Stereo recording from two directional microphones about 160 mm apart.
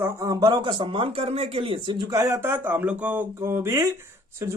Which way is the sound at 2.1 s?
20° right (ahead or behind).